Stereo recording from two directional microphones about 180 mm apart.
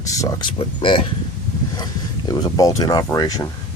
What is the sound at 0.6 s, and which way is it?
Speech, 30° left (ahead or behind).